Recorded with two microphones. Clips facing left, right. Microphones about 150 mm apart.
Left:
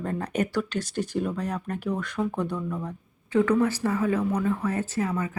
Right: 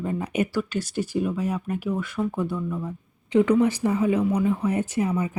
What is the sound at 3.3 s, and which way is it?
Speech, 15° right (ahead or behind).